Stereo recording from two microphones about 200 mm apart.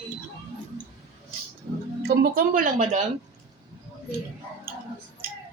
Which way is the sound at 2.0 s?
50° right (ahead or behind).